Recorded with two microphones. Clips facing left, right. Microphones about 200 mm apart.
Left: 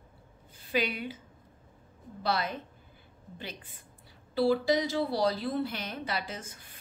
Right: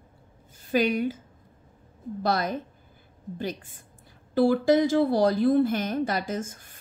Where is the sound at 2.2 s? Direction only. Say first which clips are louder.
Right 5 dB; 45° right (ahead or behind).